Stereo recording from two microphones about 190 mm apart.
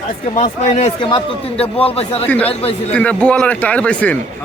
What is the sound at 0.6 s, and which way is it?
A man's voice, 35° left (ahead or behind).